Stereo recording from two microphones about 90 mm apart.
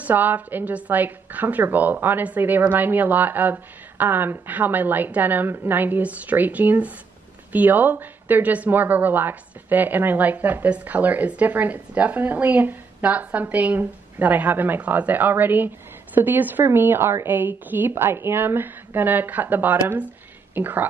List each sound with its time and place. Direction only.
0.0 s speech: 20° right (ahead or behind)